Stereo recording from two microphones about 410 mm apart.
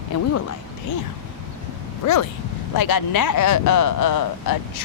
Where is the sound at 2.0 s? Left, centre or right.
Left.